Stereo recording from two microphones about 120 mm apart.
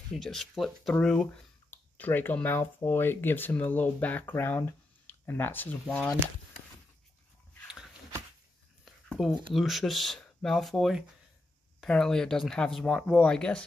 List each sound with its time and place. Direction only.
0.1 s speech: 5° left (ahead or behind)
9.5 s speech: centre (ahead or behind)